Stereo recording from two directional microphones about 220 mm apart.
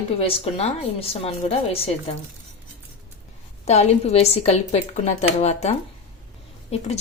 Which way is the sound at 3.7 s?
30° left (ahead or behind).